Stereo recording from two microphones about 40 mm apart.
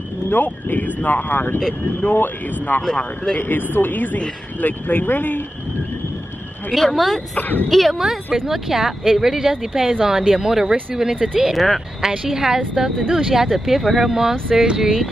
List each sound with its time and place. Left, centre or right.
0.3 s speech: left
6.7 s speech: centre
7.3 s speech: left
7.7 s speech: centre
8.5 s speech: centre
11.5 s speech: centre
12.3 s speech: centre